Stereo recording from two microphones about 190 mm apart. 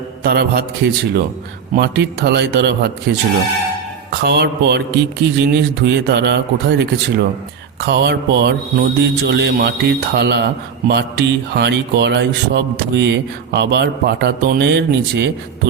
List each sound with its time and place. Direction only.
0.2 s a man's voice: 55° right (ahead or behind)
4.2 s speech: 60° right (ahead or behind)